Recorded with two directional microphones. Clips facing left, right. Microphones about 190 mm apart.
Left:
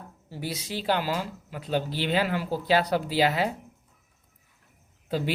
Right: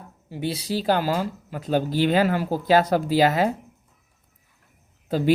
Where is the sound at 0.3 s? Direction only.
20° right (ahead or behind).